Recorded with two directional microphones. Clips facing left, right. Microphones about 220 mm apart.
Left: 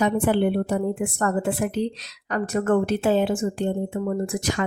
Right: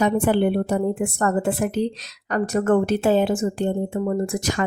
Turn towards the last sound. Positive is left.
turn(degrees=-40)  # may be behind; listen again after turning